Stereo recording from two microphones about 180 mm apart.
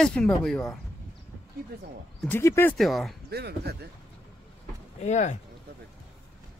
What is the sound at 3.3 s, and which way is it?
Speech, 65° right (ahead or behind).